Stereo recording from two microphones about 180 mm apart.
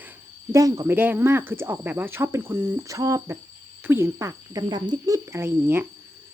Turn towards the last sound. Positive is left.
turn(degrees=-15)  # may be behind; listen again after turning